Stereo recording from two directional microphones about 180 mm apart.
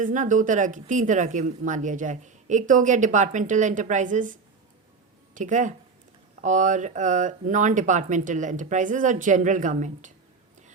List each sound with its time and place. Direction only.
0.0 s a woman's voice: 45° right (ahead or behind)